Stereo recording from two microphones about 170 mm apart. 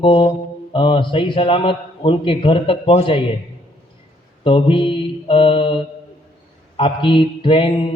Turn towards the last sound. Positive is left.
turn(degrees=30)  # may be behind; listen again after turning